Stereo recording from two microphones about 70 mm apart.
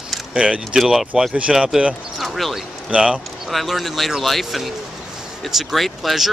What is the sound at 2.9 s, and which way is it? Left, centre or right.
Speech, centre.